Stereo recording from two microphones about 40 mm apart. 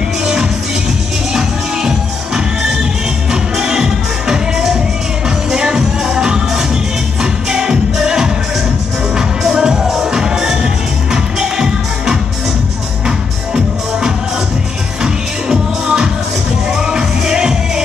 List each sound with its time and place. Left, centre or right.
1.3 s music: centre
15.4 s music: centre